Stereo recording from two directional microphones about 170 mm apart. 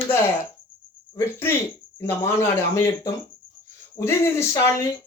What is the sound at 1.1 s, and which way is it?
Speech, 15° left (ahead or behind).